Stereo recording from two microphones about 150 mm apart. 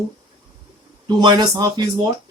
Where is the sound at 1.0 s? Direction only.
30° right (ahead or behind).